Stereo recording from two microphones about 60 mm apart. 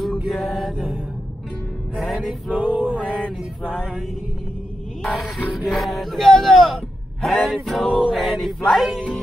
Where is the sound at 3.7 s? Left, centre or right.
Centre.